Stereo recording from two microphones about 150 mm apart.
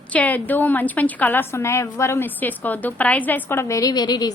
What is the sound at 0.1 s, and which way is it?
A woman's voice, 10° left (ahead or behind).